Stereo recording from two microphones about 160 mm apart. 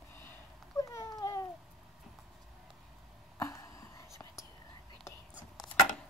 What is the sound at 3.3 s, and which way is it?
Whispering, 20° left (ahead or behind).